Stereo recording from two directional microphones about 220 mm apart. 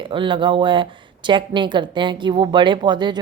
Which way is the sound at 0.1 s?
20° right (ahead or behind).